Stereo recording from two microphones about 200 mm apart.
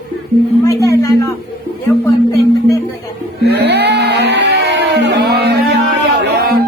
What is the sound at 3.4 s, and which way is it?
Music, 55° right (ahead or behind).